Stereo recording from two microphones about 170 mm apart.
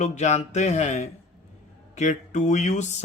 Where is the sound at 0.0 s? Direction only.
45° left (ahead or behind).